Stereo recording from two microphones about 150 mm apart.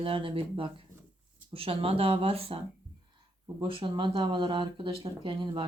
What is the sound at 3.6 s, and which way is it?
Speech, 35° right (ahead or behind).